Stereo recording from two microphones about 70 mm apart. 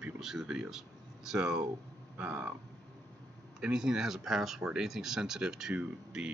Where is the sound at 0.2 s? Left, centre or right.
Centre.